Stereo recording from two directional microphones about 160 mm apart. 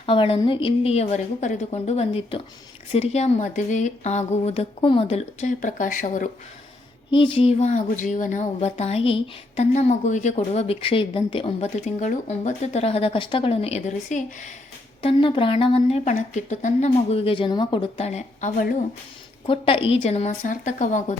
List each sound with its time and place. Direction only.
0.0 s a woman's voice: 35° left (ahead or behind); by 6.3 s 55° left (ahead or behind)
7.1 s speech: 30° left (ahead or behind); by 14.5 s 50° left (ahead or behind)
15.0 s a woman's voice: 35° left (ahead or behind); by 18.8 s 60° left (ahead or behind)
19.5 s speech: 35° left (ahead or behind); by 21.2 s 50° left (ahead or behind)